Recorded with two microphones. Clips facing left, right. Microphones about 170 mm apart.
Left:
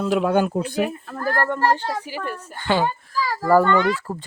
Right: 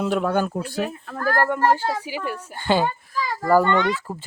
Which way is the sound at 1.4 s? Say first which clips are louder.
Right 1 dB; 10° right (ahead or behind).